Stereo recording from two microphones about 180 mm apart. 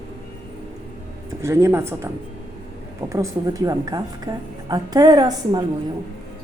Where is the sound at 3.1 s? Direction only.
20° right (ahead or behind).